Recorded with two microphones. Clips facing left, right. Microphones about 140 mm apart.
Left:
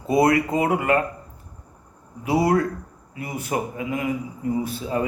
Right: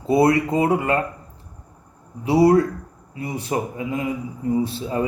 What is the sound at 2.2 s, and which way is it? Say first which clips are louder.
Speech: right 5 dB; 30° right (ahead or behind).